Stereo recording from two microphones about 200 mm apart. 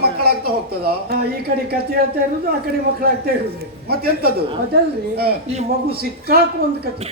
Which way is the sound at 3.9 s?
50° right (ahead or behind).